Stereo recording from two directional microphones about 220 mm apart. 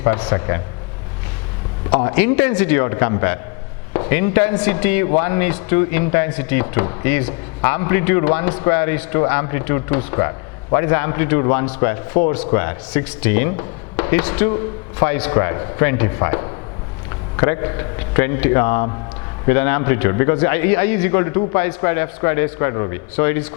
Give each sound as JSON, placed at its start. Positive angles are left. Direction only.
{"t": 0.0, "sound": "speech", "side_deg": 10}
{"t": 1.9, "sound": "speech", "side_deg": 15}